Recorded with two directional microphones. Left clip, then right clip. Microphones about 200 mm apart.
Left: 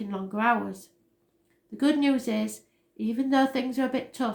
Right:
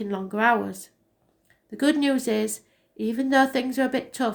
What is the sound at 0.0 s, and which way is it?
A woman's voice, 45° right (ahead or behind).